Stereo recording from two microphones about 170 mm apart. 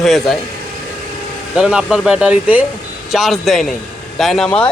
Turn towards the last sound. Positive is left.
turn(degrees=5)  # may be behind; listen again after turning